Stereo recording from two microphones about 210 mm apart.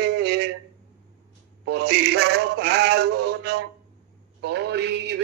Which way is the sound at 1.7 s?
55° right (ahead or behind).